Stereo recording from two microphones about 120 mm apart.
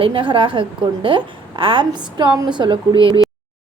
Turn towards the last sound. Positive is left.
turn(degrees=-45)  # may be behind; listen again after turning